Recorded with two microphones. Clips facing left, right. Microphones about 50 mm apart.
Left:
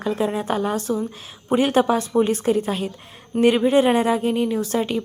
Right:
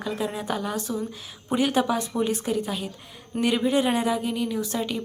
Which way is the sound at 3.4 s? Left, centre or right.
Left.